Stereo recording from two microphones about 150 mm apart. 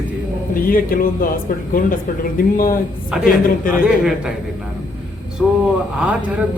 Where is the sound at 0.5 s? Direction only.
70° left (ahead or behind).